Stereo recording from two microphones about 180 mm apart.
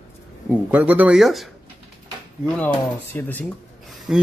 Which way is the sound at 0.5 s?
10° right (ahead or behind).